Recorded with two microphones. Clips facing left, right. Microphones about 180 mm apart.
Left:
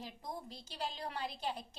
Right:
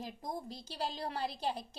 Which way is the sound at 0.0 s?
40° right (ahead or behind).